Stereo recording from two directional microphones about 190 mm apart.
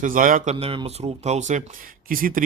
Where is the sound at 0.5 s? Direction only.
30° right (ahead or behind); by 2.4 s 50° right (ahead or behind).